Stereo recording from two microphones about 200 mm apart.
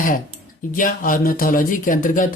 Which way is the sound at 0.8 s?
45° left (ahead or behind).